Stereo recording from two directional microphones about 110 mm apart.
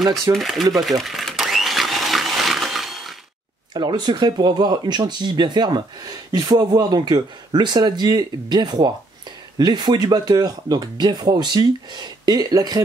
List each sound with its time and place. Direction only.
0.3 s speech: centre (ahead or behind)
0.7 s blender: centre (ahead or behind)
3.7 s speech: 40° right (ahead or behind)